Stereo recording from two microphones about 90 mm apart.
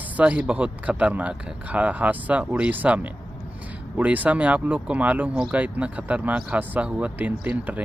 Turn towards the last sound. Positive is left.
turn(degrees=-15)  # may be behind; listen again after turning